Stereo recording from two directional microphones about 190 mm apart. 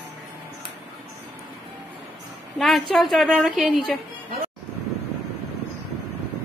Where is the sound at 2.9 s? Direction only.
Centre (ahead or behind).